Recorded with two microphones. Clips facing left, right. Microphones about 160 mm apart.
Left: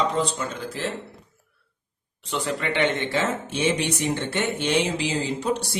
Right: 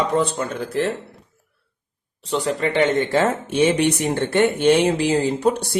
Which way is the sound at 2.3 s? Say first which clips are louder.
Right 5 dB; 35° right (ahead or behind).